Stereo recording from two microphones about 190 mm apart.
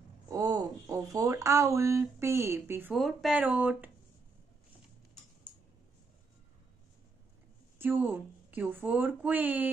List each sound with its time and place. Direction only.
0.3 s speech: 20° right (ahead or behind)
2.9 s speech: centre (ahead or behind)
7.8 s speech: 10° right (ahead or behind)